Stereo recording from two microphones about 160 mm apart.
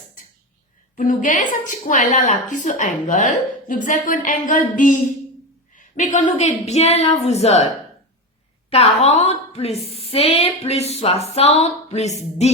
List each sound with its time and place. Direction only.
0.9 s a woman's voice: 55° left (ahead or behind)
8.7 s a woman's voice: 40° left (ahead or behind)